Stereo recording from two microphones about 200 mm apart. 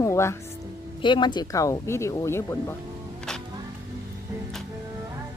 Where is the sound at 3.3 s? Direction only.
5° left (ahead or behind).